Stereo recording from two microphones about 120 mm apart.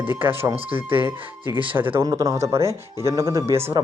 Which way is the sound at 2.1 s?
30° right (ahead or behind).